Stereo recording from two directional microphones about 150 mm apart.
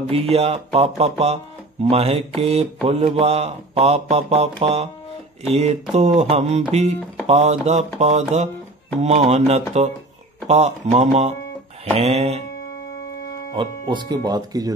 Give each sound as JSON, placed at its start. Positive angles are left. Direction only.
{"t": 0.0, "sound": "speech", "side_deg": -40}
{"t": 13.5, "sound": "speech", "side_deg": -30}